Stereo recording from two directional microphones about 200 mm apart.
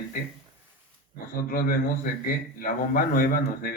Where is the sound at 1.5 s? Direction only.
45° left (ahead or behind).